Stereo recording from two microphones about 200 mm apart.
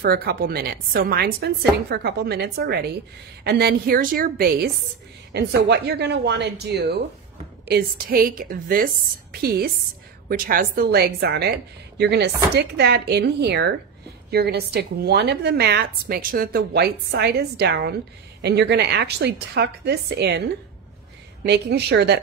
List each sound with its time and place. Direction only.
0.0 s a woman's voice: 50° right (ahead or behind)
21.5 s a woman's voice: 55° right (ahead or behind)